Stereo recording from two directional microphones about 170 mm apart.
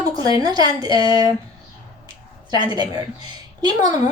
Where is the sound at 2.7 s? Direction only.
25° right (ahead or behind).